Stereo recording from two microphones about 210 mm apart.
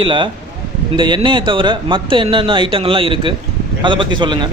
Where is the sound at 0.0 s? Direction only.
25° right (ahead or behind).